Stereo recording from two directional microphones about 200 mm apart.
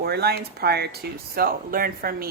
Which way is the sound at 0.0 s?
50° right (ahead or behind).